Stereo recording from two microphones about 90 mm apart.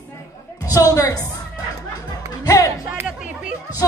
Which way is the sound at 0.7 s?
40° left (ahead or behind).